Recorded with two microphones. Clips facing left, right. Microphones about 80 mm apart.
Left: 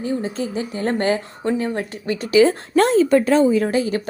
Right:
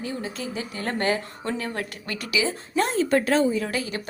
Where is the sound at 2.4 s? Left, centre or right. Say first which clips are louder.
Left 9 dB; left.